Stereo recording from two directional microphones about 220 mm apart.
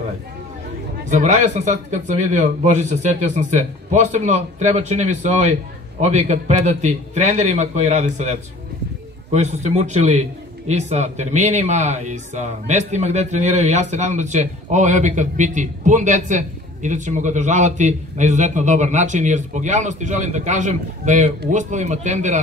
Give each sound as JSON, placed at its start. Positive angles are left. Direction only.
{"t": 1.0, "sound": "speech", "side_deg": -35}